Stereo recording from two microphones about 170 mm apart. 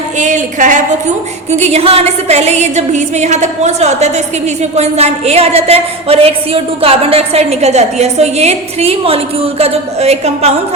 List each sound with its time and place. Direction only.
0.2 s a woman's voice: 45° right (ahead or behind)